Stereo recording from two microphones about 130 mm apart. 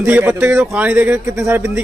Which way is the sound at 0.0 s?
15° right (ahead or behind).